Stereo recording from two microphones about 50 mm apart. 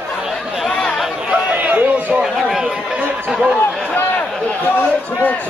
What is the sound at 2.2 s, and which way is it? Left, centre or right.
A man's voice, centre.